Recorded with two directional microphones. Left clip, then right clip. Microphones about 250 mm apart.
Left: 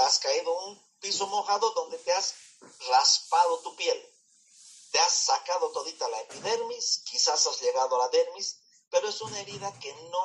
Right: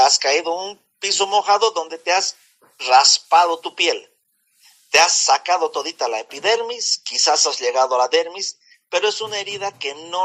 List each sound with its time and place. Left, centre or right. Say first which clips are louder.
0.0 s a man's voice: right 10 dB; right